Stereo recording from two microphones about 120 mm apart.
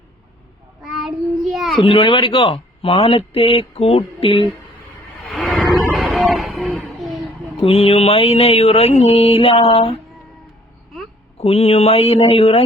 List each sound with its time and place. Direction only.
0.8 s child singing: centre (ahead or behind)
1.8 s speech: 45° left (ahead or behind)
5.3 s a sound: 10° left (ahead or behind)
7.6 s mantra: 55° left (ahead or behind)
11.3 s mantra: 60° left (ahead or behind)